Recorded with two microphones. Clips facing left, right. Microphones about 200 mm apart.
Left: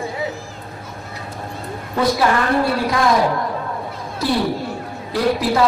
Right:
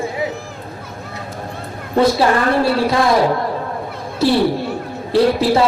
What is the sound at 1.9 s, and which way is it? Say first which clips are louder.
A man's voice: right 4 dB; 30° right (ahead or behind).